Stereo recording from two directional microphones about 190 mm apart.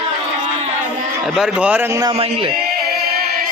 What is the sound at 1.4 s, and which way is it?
Speech, 5° right (ahead or behind).